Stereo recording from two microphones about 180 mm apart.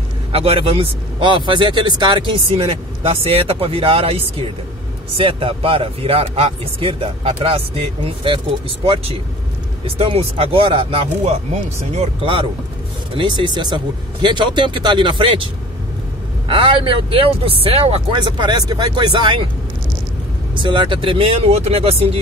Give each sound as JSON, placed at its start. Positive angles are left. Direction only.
{"t": 0.3, "sound": "speech", "side_deg": -30}
{"t": 20.5, "sound": "speech", "side_deg": -25}